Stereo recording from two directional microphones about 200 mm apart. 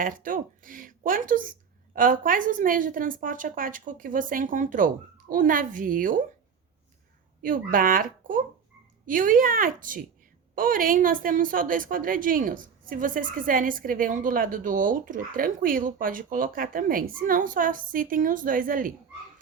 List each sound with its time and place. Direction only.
0.0 s a woman's voice: 45° right (ahead or behind)
7.4 s a woman's voice: 45° right (ahead or behind)